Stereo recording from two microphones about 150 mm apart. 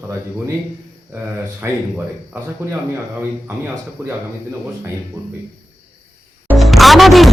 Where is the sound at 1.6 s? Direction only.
15° right (ahead or behind).